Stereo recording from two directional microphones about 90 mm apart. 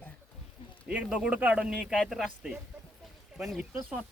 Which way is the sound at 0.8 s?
10° right (ahead or behind).